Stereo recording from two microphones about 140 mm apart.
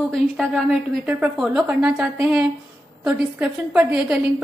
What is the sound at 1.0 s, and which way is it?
A woman's voice, 10° right (ahead or behind).